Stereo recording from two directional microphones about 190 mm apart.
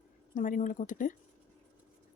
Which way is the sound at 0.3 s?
45° left (ahead or behind).